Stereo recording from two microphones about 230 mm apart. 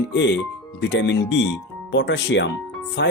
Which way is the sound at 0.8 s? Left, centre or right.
Left.